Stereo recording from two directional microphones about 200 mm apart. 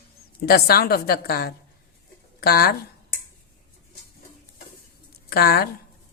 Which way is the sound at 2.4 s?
50° left (ahead or behind).